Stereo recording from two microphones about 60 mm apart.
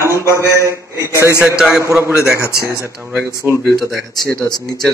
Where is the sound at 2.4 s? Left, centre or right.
Left.